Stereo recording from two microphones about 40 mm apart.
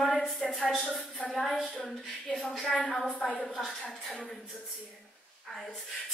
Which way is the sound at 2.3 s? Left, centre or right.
Centre.